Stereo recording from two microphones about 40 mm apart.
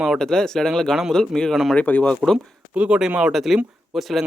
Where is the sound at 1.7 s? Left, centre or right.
Left.